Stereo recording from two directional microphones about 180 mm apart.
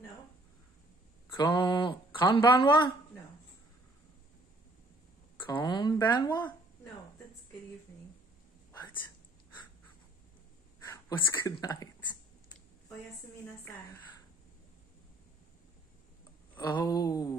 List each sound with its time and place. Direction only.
1.3 s speech: 25° left (ahead or behind)
5.6 s speech: 25° left (ahead or behind)
5.9 s speech: 15° left (ahead or behind)
10.9 s speech: 15° left (ahead or behind)
16.5 s speech: 20° left (ahead or behind)